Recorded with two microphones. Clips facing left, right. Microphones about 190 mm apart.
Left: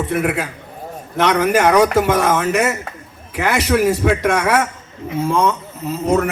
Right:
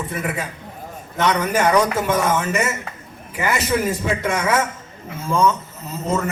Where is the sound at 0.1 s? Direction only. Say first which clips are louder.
Left 7 dB; 70° left (ahead or behind).